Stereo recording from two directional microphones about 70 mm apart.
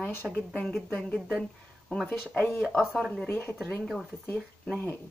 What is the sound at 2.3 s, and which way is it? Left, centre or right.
Speech, left.